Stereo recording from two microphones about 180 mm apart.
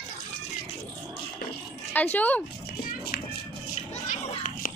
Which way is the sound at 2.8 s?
55° left (ahead or behind).